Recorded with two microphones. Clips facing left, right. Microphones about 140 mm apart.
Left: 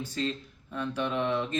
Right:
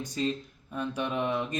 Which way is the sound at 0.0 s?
15° right (ahead or behind).